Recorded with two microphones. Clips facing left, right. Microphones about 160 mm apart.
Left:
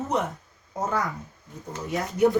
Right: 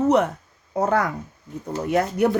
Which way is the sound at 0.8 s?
65° right (ahead or behind).